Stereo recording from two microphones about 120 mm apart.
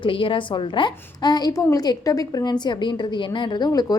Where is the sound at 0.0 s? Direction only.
45° left (ahead or behind).